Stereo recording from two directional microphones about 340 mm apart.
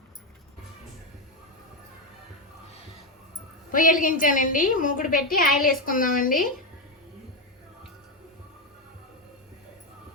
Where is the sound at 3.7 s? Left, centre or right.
Left.